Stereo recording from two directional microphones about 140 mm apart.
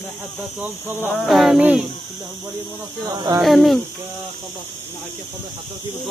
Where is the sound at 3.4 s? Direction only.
Centre (ahead or behind).